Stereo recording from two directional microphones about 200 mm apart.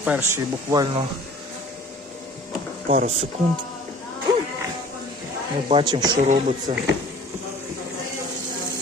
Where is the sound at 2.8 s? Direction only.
40° right (ahead or behind).